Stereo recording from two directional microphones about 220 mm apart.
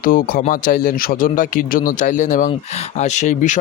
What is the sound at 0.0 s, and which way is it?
Speech, 40° left (ahead or behind).